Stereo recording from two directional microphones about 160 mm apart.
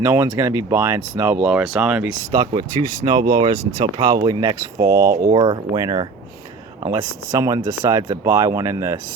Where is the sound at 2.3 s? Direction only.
25° right (ahead or behind).